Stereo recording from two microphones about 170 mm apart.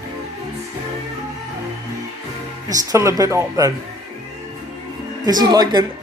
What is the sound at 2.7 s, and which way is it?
Speech, 20° right (ahead or behind).